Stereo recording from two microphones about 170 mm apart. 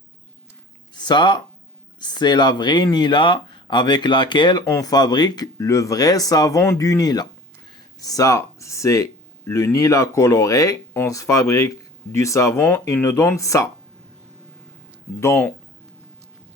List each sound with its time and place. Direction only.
0.9 s speech: 25° left (ahead or behind)
15.2 s speech: 15° left (ahead or behind)